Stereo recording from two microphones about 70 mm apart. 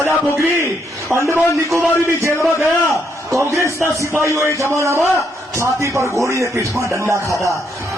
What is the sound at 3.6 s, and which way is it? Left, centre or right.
A man's voice, right.